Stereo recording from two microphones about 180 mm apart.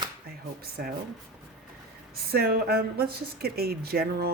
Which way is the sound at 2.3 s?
60° right (ahead or behind).